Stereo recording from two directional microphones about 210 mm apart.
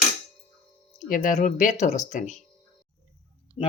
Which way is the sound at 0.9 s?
40° left (ahead or behind).